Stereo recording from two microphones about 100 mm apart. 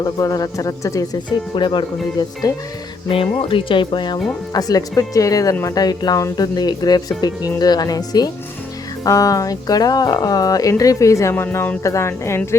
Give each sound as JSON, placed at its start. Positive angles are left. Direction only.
{"t": 0.0, "sound": "speech", "side_deg": 35}
{"t": 1.5, "sound": "speech", "side_deg": 50}
{"t": 2.5, "sound": "speech", "side_deg": 35}
{"t": 3.1, "sound": "speech", "side_deg": 60}
{"t": 4.5, "sound": "speech", "side_deg": 35}
{"t": 11.5, "sound": "speech", "side_deg": 20}
{"t": 11.8, "sound": "speech", "side_deg": 30}